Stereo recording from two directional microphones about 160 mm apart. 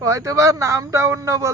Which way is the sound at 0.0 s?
20° right (ahead or behind).